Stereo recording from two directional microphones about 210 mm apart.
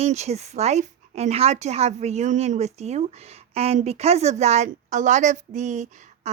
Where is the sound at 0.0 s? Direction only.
30° right (ahead or behind).